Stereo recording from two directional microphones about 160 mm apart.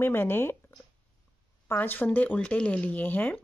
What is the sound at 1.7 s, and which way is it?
Speech, 10° left (ahead or behind).